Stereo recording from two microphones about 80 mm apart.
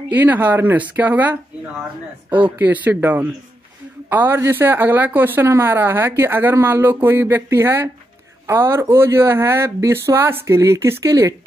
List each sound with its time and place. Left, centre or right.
0.1 s speech: right
2.6 s speech: right